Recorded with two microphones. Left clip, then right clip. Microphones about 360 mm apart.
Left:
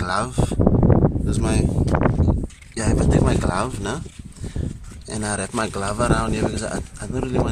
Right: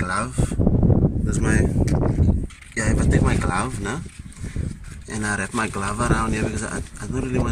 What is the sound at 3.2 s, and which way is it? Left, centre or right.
Speech, centre.